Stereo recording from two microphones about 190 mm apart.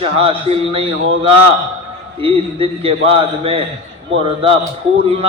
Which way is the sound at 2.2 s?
30° right (ahead or behind).